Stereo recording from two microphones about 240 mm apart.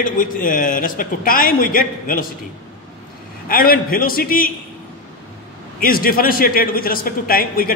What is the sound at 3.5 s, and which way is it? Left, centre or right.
Speech, left.